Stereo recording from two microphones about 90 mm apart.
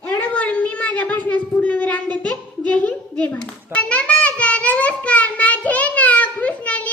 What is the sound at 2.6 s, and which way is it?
Hands, 15° left (ahead or behind).